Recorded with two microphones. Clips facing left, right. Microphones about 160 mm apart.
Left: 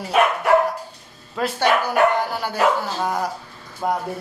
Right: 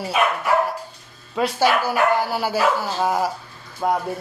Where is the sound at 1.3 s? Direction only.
5° right (ahead or behind).